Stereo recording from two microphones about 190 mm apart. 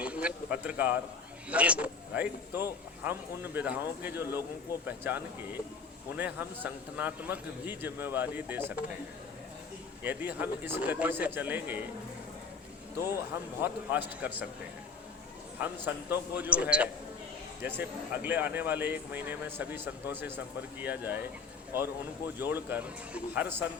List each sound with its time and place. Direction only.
0.0 s speech: 5° right (ahead or behind)
10.0 s speech: 10° right (ahead or behind)
13.6 s speech: 10° right (ahead or behind)
15.5 s speech: 10° right (ahead or behind)
22.4 s speech: 10° right (ahead or behind)